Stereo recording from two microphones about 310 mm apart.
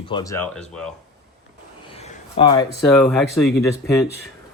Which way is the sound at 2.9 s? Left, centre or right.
Centre.